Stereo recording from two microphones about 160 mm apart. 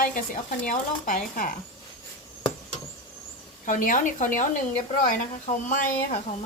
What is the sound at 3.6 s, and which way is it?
Speech, 55° left (ahead or behind).